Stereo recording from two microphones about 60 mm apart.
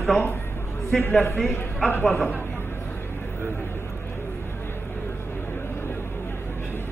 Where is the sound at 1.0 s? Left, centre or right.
Left.